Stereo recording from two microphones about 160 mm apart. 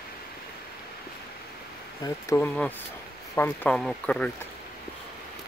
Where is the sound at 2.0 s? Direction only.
15° left (ahead or behind).